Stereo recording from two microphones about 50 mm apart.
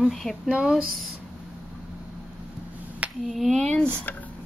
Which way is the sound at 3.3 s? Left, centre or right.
Centre.